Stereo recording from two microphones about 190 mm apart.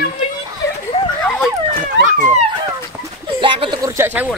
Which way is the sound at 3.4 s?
25° right (ahead or behind).